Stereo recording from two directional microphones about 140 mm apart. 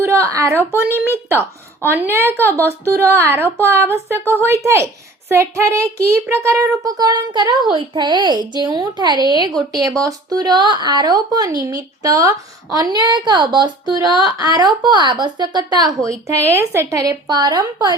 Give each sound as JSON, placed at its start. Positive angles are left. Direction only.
{"t": 0.0, "sound": "a woman's voice", "side_deg": -20}